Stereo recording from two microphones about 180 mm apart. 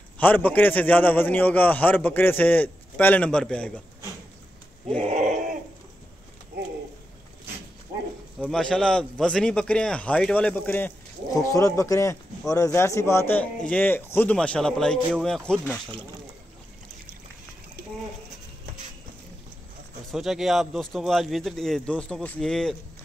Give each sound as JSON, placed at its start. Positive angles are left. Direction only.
{"t": 0.2, "sound": "a man's voice", "side_deg": 10}
{"t": 4.9, "sound": "a sound", "side_deg": -40}
{"t": 8.4, "sound": "a man's voice", "side_deg": 0}
{"t": 20.1, "sound": "a man's voice", "side_deg": 0}